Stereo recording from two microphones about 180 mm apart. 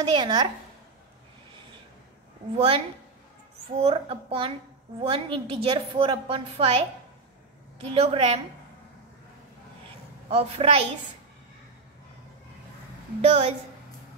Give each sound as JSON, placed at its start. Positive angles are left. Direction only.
{"t": 0.1, "sound": "a woman's voice", "side_deg": -25}
{"t": 2.5, "sound": "a woman's voice", "side_deg": -30}
{"t": 7.9, "sound": "a woman's voice", "side_deg": -30}
{"t": 10.3, "sound": "a woman's voice", "side_deg": -35}
{"t": 13.2, "sound": "a woman's voice", "side_deg": -35}